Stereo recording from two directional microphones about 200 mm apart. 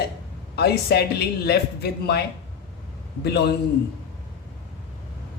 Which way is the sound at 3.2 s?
55° left (ahead or behind).